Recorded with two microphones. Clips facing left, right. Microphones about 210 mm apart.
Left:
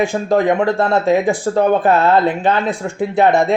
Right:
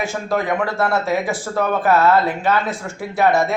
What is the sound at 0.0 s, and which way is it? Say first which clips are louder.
Speech: left 7 dB; 15° left (ahead or behind).